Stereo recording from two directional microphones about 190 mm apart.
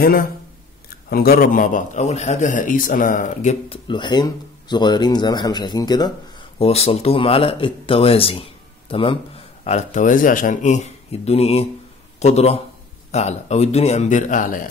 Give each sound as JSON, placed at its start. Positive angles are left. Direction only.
{"t": 0.8, "sound": "a man's voice", "side_deg": 55}
{"t": 3.6, "sound": "speech", "side_deg": 25}
{"t": 6.6, "sound": "speech", "side_deg": 30}
{"t": 9.7, "sound": "speech", "side_deg": 40}